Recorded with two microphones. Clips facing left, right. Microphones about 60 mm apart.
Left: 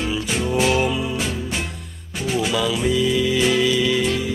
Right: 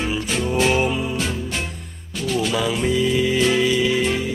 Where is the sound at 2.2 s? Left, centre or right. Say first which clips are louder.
Even; centre.